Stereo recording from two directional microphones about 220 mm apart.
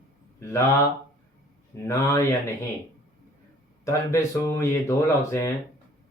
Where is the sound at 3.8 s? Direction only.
15° left (ahead or behind).